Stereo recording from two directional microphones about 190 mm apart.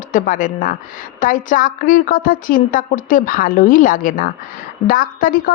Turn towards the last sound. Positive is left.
turn(degrees=45)  # may be behind; listen again after turning